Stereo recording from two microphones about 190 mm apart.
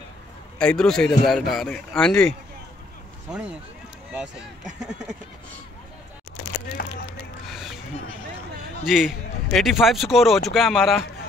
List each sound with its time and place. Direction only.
0.6 s a man's voice: 5° left (ahead or behind)
3.3 s a man's voice: 5° right (ahead or behind)
4.7 s a man's voice: 5° right (ahead or behind)
6.8 s a sound: 50° left (ahead or behind)
7.4 s a sound: centre (ahead or behind)
8.8 s a man's voice: centre (ahead or behind)